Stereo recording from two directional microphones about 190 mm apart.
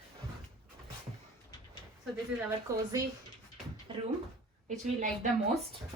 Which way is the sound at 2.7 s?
15° right (ahead or behind).